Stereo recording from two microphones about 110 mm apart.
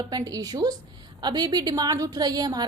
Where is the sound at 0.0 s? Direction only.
35° right (ahead or behind).